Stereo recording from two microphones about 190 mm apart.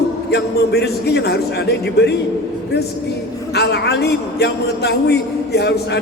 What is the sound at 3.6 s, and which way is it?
A man's voice, 60° left (ahead or behind).